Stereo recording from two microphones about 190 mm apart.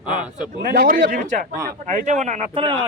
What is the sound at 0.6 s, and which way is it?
Speech, 50° right (ahead or behind).